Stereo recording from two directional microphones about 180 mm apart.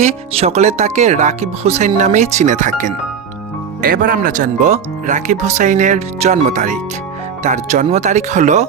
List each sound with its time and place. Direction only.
0.0 s speech: 35° right (ahead or behind)